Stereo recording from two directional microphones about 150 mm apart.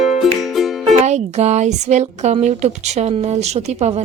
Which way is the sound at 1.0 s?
50° right (ahead or behind).